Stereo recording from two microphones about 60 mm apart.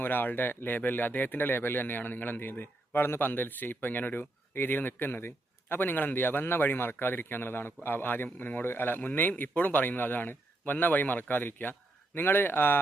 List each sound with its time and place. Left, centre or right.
0.0 s speech: left